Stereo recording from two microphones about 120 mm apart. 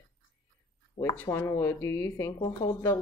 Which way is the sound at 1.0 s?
55° left (ahead or behind).